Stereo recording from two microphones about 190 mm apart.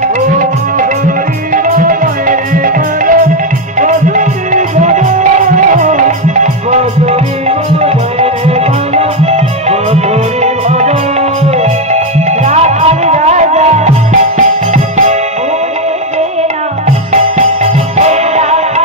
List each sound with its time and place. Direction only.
1.5 s music: 45° right (ahead or behind)
17.1 s music: 35° right (ahead or behind)